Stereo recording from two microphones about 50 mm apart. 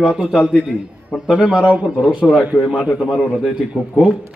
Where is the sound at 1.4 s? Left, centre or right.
Centre.